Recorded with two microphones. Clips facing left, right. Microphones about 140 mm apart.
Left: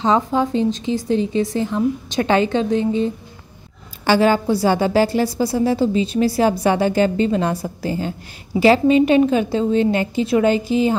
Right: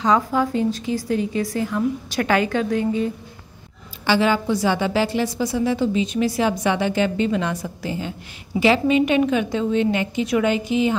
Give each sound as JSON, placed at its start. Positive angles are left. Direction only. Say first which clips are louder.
{"t": 0.0, "sound": "a woman's voice", "louder": "left 2 dB", "side_deg": 25}
{"t": 4.0, "sound": "a woman's voice", "louder": "left 4 dB", "side_deg": 45}